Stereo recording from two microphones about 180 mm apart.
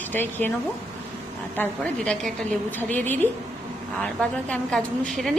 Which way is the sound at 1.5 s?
5° left (ahead or behind).